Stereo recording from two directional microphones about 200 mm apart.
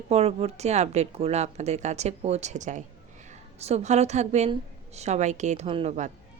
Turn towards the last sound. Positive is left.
turn(degrees=-35)  # may be behind; listen again after turning